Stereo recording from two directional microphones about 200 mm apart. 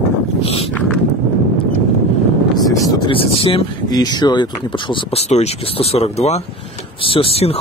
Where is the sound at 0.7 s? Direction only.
5° left (ahead or behind).